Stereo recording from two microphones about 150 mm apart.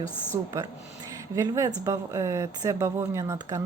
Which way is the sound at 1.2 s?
20° right (ahead or behind).